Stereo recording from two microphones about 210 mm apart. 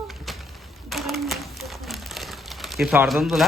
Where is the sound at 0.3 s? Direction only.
Centre (ahead or behind).